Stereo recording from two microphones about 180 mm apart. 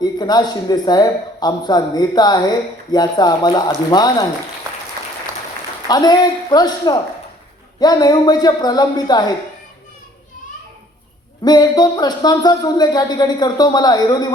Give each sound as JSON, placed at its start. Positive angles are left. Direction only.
{"t": 0.0, "sound": "speech", "side_deg": 20}
{"t": 5.9, "sound": "speech", "side_deg": 20}
{"t": 11.4, "sound": "speech", "side_deg": 20}